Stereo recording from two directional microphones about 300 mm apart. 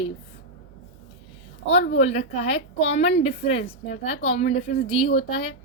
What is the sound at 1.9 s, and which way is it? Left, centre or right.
A woman's voice, left.